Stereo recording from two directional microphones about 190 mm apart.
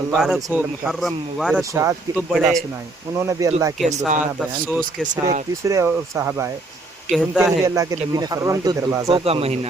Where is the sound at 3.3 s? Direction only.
15° right (ahead or behind).